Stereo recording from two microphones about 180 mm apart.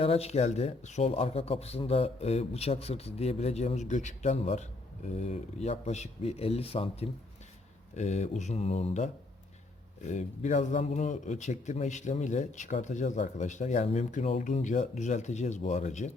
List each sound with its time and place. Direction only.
0.0 s a man's voice: 35° left (ahead or behind)